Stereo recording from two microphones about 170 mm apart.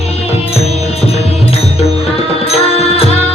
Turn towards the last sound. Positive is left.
turn(degrees=35)  # may be behind; listen again after turning